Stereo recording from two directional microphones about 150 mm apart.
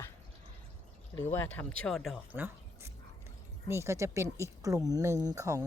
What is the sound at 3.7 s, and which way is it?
Speech, 20° right (ahead or behind).